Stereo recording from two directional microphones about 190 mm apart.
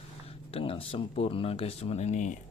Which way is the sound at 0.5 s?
30° left (ahead or behind).